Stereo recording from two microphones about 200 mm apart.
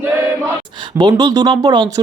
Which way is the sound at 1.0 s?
20° right (ahead or behind).